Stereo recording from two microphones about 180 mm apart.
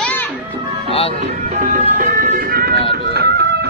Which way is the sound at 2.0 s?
50° right (ahead or behind).